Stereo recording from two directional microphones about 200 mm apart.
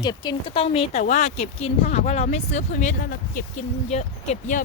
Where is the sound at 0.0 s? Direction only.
20° left (ahead or behind).